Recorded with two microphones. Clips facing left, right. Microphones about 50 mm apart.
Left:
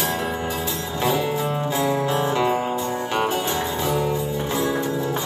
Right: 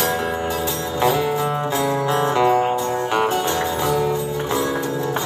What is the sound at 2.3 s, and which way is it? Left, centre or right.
Music, centre.